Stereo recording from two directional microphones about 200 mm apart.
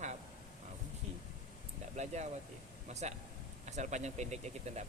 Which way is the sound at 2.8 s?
35° right (ahead or behind).